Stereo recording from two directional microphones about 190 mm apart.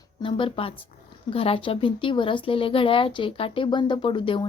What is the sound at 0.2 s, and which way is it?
Speech, 25° left (ahead or behind).